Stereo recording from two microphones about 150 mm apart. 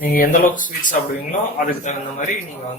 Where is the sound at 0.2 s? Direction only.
60° left (ahead or behind).